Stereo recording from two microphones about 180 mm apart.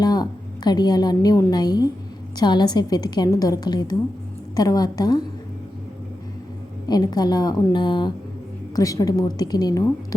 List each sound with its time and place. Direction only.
0.0 s a woman's voice: 25° left (ahead or behind)
6.8 s a woman's voice: 20° left (ahead or behind)